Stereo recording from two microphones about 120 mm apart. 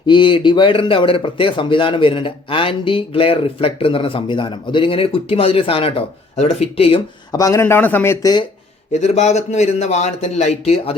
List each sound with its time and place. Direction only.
0.0 s speech: 45° left (ahead or behind)
7.3 s a man's voice: 25° left (ahead or behind)
8.2 s speech: 35° left (ahead or behind)
8.9 s a man's voice: 70° left (ahead or behind)